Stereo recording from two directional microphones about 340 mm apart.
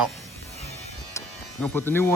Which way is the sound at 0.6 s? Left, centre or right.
Centre.